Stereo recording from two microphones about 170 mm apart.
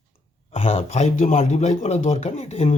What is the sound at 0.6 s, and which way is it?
Speech, 40° left (ahead or behind).